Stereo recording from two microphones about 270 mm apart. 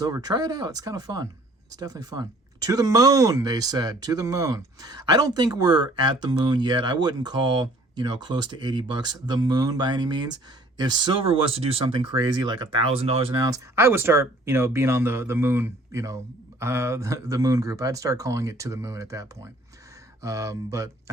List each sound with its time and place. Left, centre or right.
0.0 s speech: centre